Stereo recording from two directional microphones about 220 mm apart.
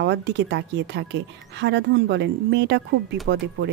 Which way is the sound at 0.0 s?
50° right (ahead or behind).